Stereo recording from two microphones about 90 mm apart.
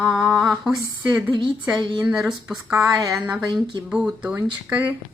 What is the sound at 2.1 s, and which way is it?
Speech, 10° right (ahead or behind).